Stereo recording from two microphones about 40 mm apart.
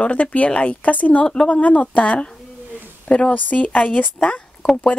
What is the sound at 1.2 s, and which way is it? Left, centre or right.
Speech, left.